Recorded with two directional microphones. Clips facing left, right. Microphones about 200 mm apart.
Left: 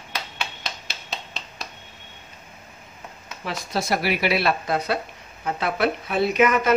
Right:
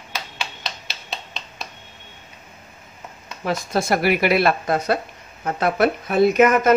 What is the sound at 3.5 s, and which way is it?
Speech, 50° right (ahead or behind).